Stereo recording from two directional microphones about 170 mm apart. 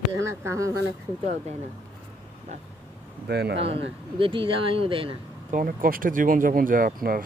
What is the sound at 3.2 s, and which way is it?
Speech, 75° right (ahead or behind).